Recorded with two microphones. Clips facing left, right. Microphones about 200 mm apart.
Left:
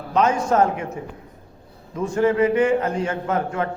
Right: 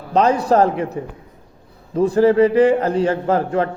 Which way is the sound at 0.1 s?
35° right (ahead or behind).